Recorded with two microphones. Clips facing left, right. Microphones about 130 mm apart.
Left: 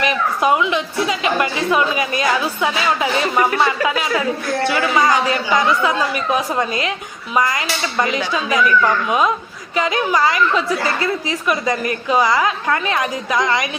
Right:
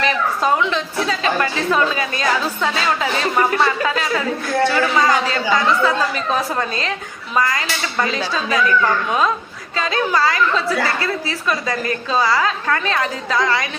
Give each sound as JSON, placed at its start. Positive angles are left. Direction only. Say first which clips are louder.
{"t": 0.0, "sound": "a woman's voice", "louder": "left 1 dB", "side_deg": 15}